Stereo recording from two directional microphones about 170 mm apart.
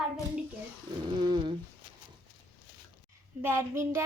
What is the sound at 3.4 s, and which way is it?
Speech, 15° right (ahead or behind).